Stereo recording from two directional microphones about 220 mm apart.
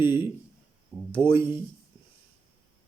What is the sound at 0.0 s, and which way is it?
Speech, 20° left (ahead or behind).